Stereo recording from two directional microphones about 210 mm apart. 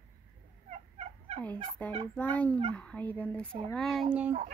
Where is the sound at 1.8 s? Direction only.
10° left (ahead or behind).